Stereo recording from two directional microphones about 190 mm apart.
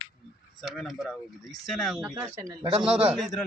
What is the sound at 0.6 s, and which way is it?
Speech, centre (ahead or behind).